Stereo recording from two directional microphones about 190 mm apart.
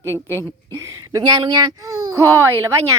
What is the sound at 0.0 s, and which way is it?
A child's voice, 15° right (ahead or behind).